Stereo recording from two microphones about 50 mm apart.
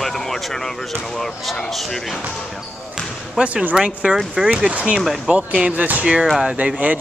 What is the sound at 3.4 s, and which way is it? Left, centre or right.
Speech, centre.